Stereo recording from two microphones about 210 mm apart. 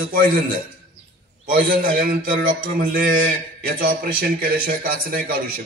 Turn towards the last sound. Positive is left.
turn(degrees=-45)  # may be behind; listen again after turning